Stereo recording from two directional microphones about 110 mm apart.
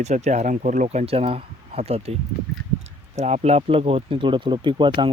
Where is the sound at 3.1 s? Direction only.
80° right; by 5.1 s 45° right (ahead or behind).